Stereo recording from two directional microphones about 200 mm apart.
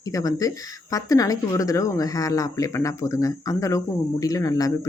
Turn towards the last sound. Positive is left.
turn(degrees=20)  # may be behind; listen again after turning